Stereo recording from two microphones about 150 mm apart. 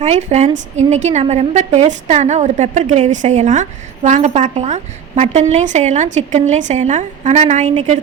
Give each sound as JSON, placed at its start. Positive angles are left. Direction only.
{"t": 0.0, "sound": "a woman's voice", "side_deg": -45}